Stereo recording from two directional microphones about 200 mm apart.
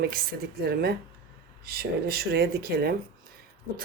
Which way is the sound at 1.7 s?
50° right (ahead or behind).